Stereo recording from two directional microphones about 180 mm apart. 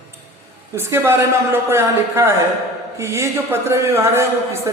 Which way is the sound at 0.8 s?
15° right (ahead or behind).